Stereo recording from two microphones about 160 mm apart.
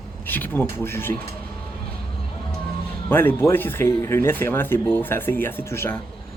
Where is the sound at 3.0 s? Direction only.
15° left (ahead or behind).